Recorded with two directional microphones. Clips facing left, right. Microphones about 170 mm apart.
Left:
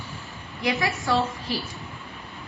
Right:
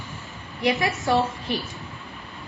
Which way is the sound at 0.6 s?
20° right (ahead or behind).